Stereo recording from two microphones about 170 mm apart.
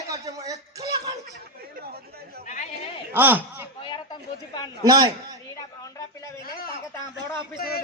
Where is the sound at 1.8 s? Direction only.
65° right (ahead or behind).